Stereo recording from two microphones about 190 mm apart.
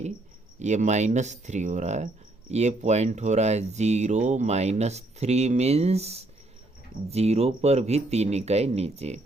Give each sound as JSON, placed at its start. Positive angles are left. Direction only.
{"t": 0.6, "sound": "speech", "side_deg": -40}